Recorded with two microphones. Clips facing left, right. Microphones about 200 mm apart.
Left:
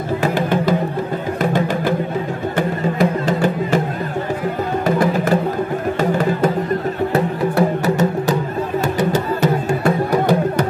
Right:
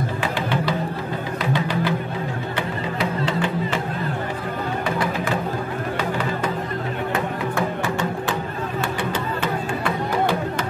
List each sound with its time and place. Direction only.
0.2 s music: 45° left (ahead or behind)
4.8 s music: 45° left (ahead or behind)